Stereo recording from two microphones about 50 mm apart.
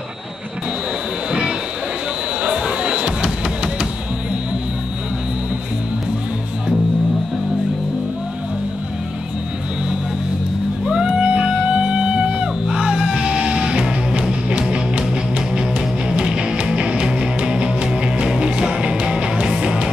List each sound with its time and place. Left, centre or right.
2.4 s music: centre
10.9 s music: centre
16.1 s music: centre